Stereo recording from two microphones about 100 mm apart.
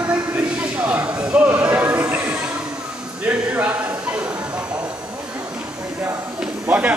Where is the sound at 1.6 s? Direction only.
15° right (ahead or behind).